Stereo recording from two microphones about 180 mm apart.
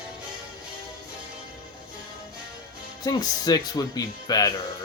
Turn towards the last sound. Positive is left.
turn(degrees=20)  # may be behind; listen again after turning